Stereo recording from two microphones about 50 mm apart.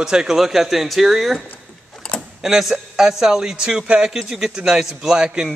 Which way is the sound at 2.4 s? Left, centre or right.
Centre.